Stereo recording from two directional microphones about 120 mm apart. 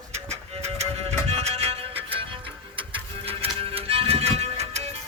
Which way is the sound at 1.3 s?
60° right (ahead or behind).